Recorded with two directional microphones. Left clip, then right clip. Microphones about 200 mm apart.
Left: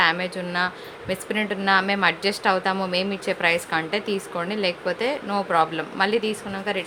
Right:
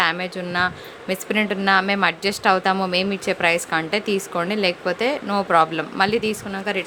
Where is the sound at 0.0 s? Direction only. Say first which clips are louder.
Even; 25° right (ahead or behind).